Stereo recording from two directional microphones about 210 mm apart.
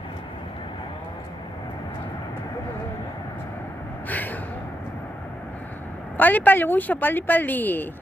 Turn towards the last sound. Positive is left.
turn(degrees=10)  # may be behind; listen again after turning